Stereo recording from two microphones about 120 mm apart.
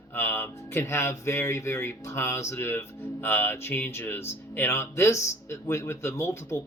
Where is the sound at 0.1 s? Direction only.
20° left (ahead or behind).